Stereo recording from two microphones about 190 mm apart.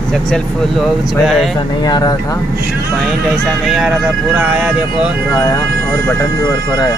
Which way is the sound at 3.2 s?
Centre (ahead or behind).